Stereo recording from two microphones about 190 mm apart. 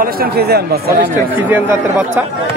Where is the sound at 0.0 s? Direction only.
55° right (ahead or behind).